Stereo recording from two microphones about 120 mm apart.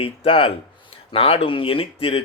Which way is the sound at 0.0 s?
50° left (ahead or behind).